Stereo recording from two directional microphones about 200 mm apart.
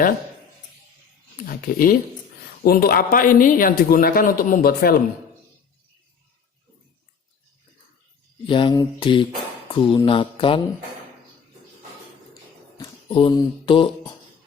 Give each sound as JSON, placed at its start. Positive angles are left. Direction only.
{"t": 1.5, "sound": "a man's voice", "side_deg": 45}
{"t": 8.4, "sound": "mantra", "side_deg": 25}
{"t": 9.6, "sound": "speech", "side_deg": 25}
{"t": 12.7, "sound": "mantra", "side_deg": 25}